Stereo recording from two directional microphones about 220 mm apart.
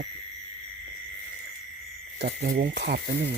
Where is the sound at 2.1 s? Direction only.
45° right (ahead or behind).